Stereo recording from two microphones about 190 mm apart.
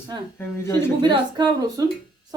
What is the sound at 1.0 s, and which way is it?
Speech, 25° right (ahead or behind).